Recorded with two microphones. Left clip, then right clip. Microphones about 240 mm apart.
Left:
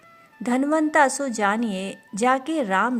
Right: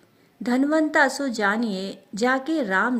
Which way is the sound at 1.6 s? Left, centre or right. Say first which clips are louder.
Even; left.